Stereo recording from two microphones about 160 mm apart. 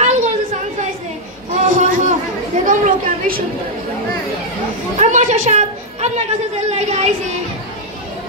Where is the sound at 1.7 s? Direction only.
50° right (ahead or behind).